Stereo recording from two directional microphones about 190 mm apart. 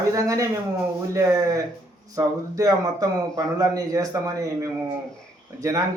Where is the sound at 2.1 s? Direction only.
20° right (ahead or behind).